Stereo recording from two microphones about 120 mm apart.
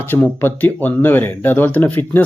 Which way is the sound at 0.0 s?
15° left (ahead or behind).